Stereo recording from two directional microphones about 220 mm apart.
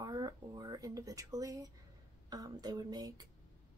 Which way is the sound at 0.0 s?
15° right (ahead or behind).